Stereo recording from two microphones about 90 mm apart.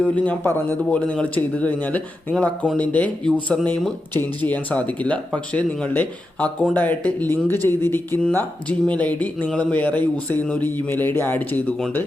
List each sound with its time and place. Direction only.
0.0 s speech: 20° left (ahead or behind)